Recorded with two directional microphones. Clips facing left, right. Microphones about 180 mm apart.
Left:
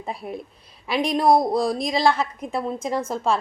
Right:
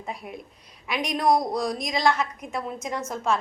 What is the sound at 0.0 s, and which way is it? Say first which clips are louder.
A woman's voice: left 5 dB; 30° left (ahead or behind).